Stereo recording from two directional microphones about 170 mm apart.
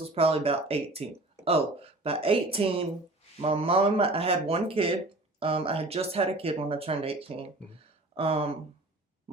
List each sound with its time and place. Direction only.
0.0 s speech: 35° right (ahead or behind)